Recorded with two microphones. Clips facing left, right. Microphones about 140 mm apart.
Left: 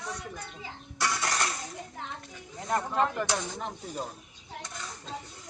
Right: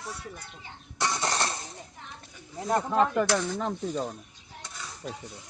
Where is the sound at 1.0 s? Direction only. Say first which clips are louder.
Right 2 dB; 25° right (ahead or behind).